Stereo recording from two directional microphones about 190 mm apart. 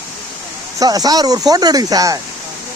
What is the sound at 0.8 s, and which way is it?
Speech, 20° right (ahead or behind).